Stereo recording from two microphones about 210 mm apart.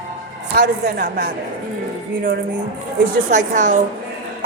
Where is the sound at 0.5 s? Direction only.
45° right (ahead or behind).